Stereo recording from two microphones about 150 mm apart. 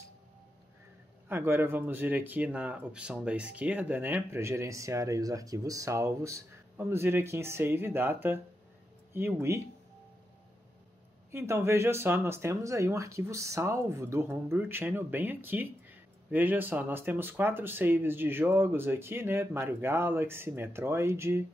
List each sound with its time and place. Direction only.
1.3 s speech: 15° right (ahead or behind)
11.3 s speech: 15° right (ahead or behind)